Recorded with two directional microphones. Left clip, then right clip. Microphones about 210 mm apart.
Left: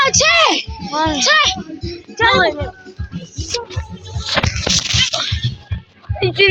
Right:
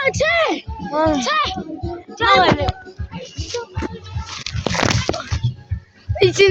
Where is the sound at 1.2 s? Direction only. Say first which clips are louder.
Left 6 dB; 20° left (ahead or behind).